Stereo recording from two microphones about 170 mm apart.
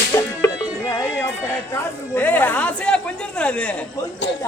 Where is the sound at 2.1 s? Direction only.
10° left (ahead or behind).